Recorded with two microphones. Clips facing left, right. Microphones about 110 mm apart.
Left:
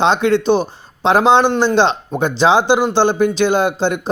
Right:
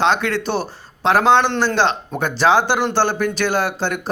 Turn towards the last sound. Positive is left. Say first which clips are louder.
# left 5 dB
turn(degrees=25)  # may be behind; listen again after turning